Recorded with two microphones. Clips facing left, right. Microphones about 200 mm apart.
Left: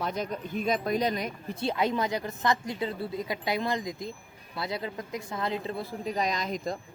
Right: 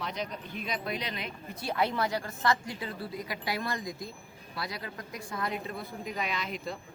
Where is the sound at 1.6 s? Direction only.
20° left (ahead or behind).